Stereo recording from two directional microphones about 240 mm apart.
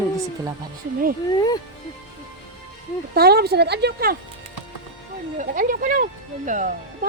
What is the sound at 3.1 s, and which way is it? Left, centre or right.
Speech, right.